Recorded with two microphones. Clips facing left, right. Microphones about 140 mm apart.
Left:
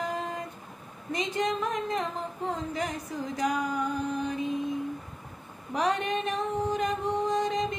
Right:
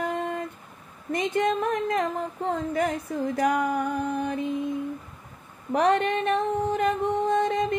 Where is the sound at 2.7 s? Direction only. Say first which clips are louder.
Right 6 dB; 60° right (ahead or behind).